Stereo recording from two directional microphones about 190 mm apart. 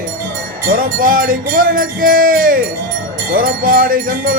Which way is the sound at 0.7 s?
50° right (ahead or behind).